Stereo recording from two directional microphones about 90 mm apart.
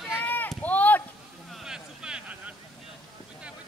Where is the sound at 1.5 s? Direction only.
5° right (ahead or behind).